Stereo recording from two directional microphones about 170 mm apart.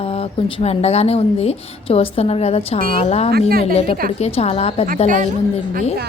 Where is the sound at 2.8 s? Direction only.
60° right (ahead or behind).